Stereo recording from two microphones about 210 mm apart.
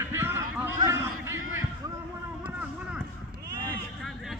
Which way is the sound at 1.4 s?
75° right (ahead or behind).